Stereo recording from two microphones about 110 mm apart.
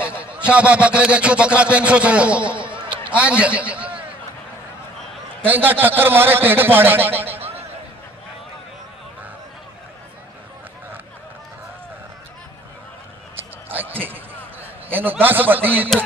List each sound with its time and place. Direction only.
0.2 s a man's voice: 10° right (ahead or behind)
5.4 s a man's voice: 15° right (ahead or behind)
13.4 s a sound: 20° right (ahead or behind)